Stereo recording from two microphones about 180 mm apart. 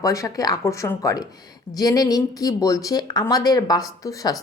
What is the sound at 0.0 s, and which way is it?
A woman's voice, 20° left (ahead or behind).